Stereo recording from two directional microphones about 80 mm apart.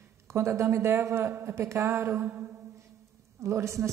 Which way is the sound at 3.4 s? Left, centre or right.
Right.